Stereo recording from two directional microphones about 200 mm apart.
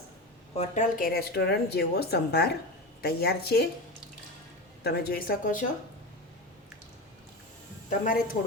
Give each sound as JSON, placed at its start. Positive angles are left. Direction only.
{"t": 0.5, "sound": "speech", "side_deg": 35}
{"t": 4.8, "sound": "speech", "side_deg": 50}
{"t": 7.9, "sound": "speech", "side_deg": 45}